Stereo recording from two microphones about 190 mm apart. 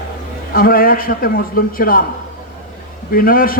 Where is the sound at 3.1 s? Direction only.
50° left (ahead or behind).